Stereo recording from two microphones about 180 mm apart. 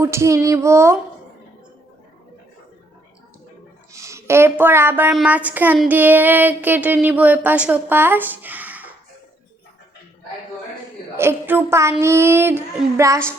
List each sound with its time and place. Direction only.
0.0 s child singing: 15° right (ahead or behind)
3.9 s speech: 15° right (ahead or behind)
5.1 s child singing: 10° right (ahead or behind)
11.2 s child singing: 10° right (ahead or behind)